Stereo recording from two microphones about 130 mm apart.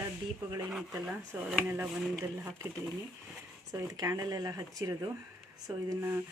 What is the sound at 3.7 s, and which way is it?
Speech, 25° right (ahead or behind).